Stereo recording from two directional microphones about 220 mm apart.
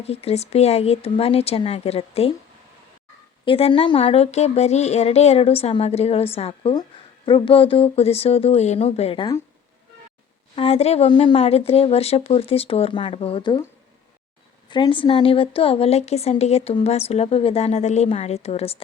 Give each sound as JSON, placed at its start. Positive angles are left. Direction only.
{"t": 0.0, "sound": "speech", "side_deg": 25}
{"t": 3.4, "sound": "speech", "side_deg": 25}
{"t": 10.5, "sound": "speech", "side_deg": 25}
{"t": 14.7, "sound": "speech", "side_deg": 20}